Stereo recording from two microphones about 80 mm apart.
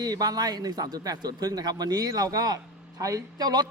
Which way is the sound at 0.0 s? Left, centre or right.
Right.